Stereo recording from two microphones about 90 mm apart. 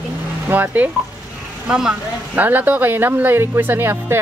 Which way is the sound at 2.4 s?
20° right (ahead or behind).